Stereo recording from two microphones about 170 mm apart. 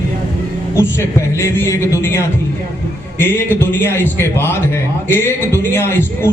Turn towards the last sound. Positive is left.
turn(degrees=15)  # may be behind; listen again after turning